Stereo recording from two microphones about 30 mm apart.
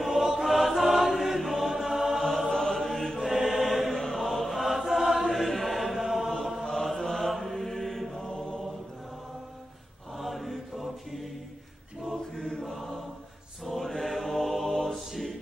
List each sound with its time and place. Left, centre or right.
0.0 s chant: centre
0.4 s choir: centre
2.1 s choir: centre
2.5 s choir: centre
3.2 s choir: centre
3.9 s choir: centre
5.3 s chant: centre
6.6 s mantra: centre
8.3 s mantra: left
10.1 s mantra: centre
12.0 s choir: centre
13.7 s chant: centre